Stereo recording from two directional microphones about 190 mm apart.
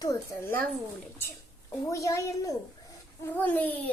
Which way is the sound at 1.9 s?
15° left (ahead or behind).